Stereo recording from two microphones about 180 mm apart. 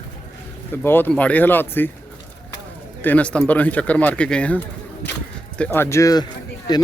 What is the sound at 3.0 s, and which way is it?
Speech, 10° left (ahead or behind).